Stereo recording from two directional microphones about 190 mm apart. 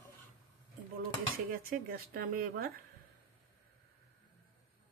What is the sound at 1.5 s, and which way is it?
Speech, 50° right (ahead or behind).